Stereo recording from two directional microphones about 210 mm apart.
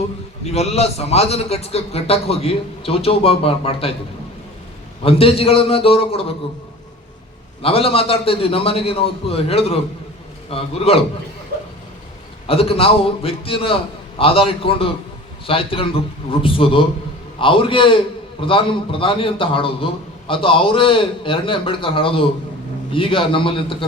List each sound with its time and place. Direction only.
0.4 s a man's voice: 30° left (ahead or behind)
5.0 s a man's voice: 25° left (ahead or behind)
7.6 s a man's voice: 25° left (ahead or behind)
12.5 s a man's voice: 25° left (ahead or behind)